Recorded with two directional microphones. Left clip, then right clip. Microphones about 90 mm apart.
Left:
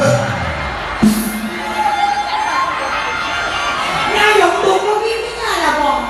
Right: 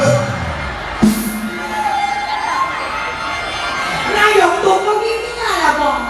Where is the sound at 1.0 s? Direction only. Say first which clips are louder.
Even; 20° right (ahead or behind).